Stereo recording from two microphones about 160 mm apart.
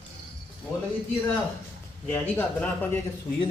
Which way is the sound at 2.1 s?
10° left (ahead or behind).